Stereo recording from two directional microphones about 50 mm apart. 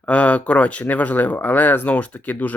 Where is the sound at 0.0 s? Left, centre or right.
Left.